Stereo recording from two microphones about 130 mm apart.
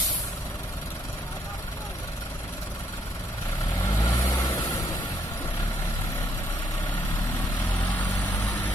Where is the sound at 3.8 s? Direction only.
25° left (ahead or behind).